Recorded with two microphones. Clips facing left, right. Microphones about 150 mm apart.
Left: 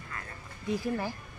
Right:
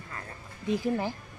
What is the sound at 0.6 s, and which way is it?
Speech, 20° right (ahead or behind).